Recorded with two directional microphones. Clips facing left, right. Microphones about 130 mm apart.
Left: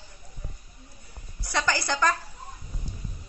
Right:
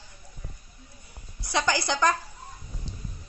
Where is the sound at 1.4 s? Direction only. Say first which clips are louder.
Right 1 dB; 15° right (ahead or behind).